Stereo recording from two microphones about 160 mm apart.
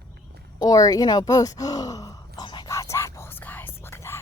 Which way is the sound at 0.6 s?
25° left (ahead or behind).